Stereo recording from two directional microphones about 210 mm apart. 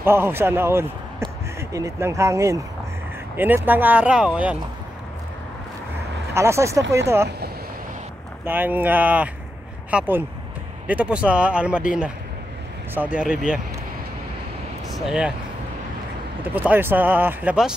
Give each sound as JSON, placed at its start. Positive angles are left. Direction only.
{"t": 0.0, "sound": "speech", "side_deg": -10}
{"t": 6.3, "sound": "speech", "side_deg": -15}
{"t": 7.2, "sound": "vehicle", "side_deg": -50}
{"t": 8.5, "sound": "speech", "side_deg": -10}
{"t": 12.9, "sound": "speech", "side_deg": -5}
{"t": 14.9, "sound": "speech", "side_deg": 0}
{"t": 16.4, "sound": "speech", "side_deg": -10}